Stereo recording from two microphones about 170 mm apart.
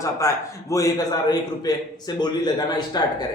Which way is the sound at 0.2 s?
20° left (ahead or behind).